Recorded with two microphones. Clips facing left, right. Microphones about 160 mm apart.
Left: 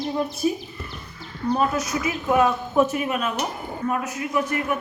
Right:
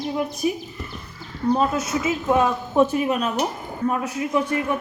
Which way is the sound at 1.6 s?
25° right (ahead or behind).